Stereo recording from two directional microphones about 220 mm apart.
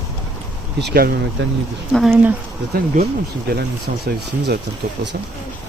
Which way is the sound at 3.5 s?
45° right (ahead or behind).